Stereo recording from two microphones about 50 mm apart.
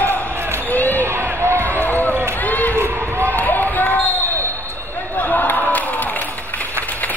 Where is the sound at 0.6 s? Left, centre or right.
Left.